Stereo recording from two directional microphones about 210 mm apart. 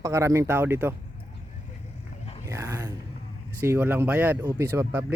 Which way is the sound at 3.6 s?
10° right (ahead or behind).